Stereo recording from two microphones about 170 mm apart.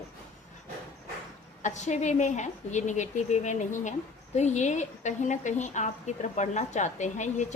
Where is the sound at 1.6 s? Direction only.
45° left (ahead or behind).